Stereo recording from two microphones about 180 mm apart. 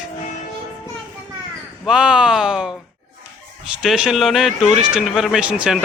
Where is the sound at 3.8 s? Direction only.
5° right (ahead or behind).